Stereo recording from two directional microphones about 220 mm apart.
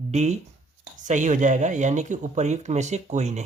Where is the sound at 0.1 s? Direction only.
30° right (ahead or behind).